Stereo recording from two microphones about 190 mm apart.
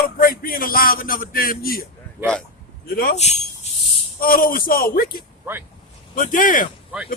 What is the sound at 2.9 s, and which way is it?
Speech, 55° left (ahead or behind).